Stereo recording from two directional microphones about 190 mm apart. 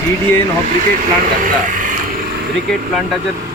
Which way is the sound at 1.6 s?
40° right (ahead or behind).